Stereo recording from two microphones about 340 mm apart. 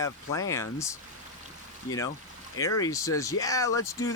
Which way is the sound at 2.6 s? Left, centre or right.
Centre.